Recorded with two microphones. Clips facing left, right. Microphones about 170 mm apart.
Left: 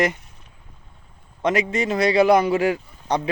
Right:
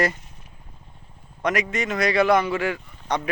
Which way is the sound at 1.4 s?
30° left (ahead or behind).